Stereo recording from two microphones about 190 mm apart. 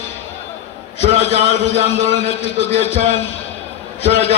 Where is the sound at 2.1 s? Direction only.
35° left (ahead or behind).